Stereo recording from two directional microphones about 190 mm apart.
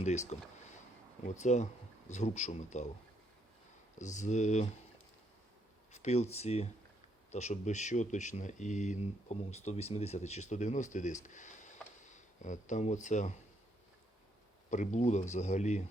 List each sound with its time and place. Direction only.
0.0 s speech: 35° left (ahead or behind)
1.4 s speech: 40° left (ahead or behind)
3.9 s speech: 40° left (ahead or behind)
5.9 s speech: 35° left (ahead or behind)
14.7 s speech: 40° left (ahead or behind)